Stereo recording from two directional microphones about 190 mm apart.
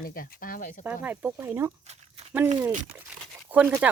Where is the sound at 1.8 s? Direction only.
35° right (ahead or behind).